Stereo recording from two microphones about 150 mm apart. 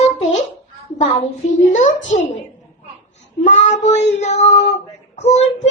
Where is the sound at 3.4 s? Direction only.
50° left (ahead or behind).